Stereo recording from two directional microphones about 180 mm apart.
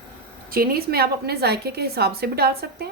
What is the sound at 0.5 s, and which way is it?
A woman's voice, 55° right (ahead or behind).